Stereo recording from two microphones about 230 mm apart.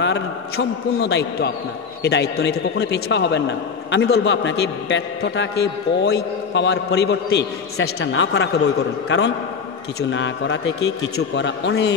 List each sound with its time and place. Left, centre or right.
0.0 s a man's voice: left